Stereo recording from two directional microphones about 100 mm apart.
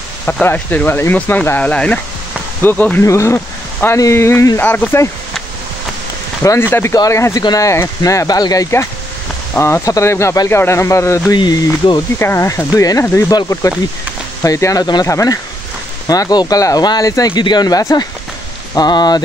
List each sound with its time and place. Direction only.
0.2 s speech: 20° left (ahead or behind)
3.1 s speech: 30° left (ahead or behind)
4.6 s speech: 20° left (ahead or behind)
6.4 s speech: 30° left (ahead or behind)
11.3 s speech: 40° left (ahead or behind)
12.2 s speech: 25° left (ahead or behind); by 19.2 s 45° left (ahead or behind)